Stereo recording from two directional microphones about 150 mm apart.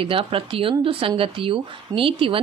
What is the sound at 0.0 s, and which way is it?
Speech, 35° right (ahead or behind).